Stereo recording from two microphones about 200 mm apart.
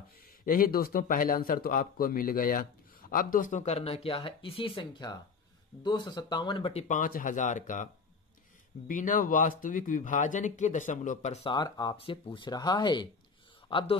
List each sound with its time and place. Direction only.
0.5 s a man's voice: 45° left (ahead or behind); by 13.9 s 25° left (ahead or behind)